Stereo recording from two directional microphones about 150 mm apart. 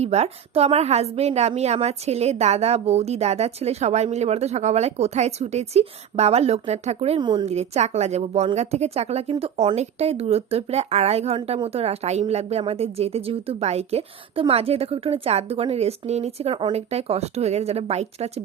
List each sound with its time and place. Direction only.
0.0 s a woman's voice: 45° right (ahead or behind)
7.2 s a woman's voice: 30° right (ahead or behind)
7.4 s a woman's voice: 45° right (ahead or behind)